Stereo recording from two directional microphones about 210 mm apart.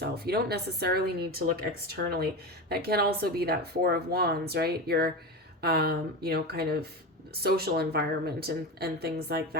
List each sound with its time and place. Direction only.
0.0 s speech: 50° right (ahead or behind)